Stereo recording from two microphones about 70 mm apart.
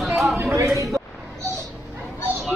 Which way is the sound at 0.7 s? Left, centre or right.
Right.